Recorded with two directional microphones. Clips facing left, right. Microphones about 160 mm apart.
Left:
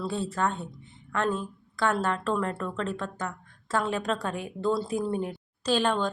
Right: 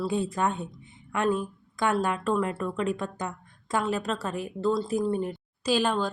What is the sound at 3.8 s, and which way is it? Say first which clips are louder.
Speech: even; 5° right (ahead or behind).